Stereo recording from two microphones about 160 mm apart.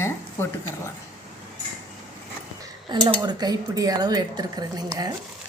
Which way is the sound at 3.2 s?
25° right (ahead or behind).